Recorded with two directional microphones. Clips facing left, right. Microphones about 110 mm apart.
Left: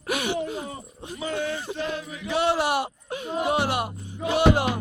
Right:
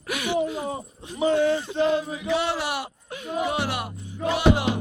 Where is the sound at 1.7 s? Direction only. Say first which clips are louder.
Right 8 dB; 25° right (ahead or behind).